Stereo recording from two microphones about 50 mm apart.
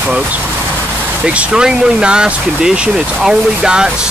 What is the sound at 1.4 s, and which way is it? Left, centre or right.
Speech, centre.